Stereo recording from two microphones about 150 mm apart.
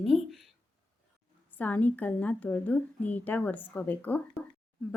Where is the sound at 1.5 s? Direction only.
10° left (ahead or behind).